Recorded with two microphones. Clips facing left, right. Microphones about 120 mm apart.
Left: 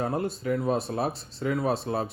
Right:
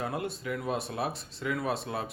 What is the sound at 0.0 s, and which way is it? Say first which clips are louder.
A man's voice: left 5 dB; 35° left (ahead or behind).